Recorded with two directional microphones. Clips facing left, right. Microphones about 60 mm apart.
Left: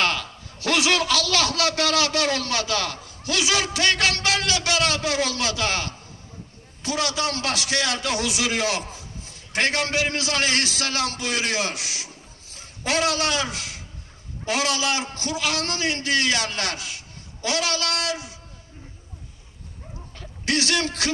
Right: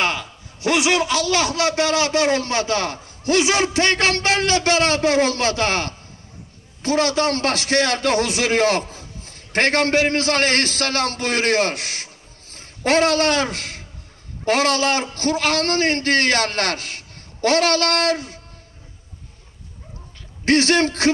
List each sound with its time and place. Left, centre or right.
0.0 s a man's voice: right
20.4 s a man's voice: right